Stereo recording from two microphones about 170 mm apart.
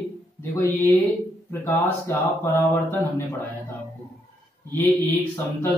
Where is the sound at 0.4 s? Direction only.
15° left (ahead or behind).